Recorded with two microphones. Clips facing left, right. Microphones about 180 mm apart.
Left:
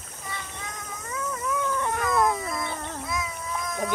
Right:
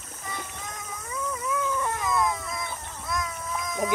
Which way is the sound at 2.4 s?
60° left (ahead or behind).